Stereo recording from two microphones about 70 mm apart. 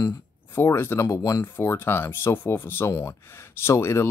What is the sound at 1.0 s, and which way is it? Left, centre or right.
Speech, left.